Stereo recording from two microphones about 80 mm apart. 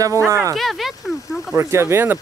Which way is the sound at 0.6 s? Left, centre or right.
Centre.